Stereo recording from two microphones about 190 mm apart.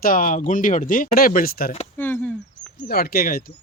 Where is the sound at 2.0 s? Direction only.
10° left (ahead or behind).